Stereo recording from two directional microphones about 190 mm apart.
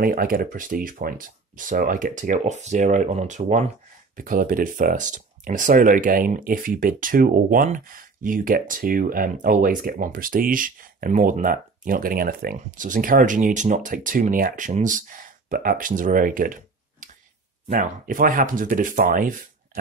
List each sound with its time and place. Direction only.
0.0 s speech: 50° right (ahead or behind)
17.6 s speech: 45° right (ahead or behind)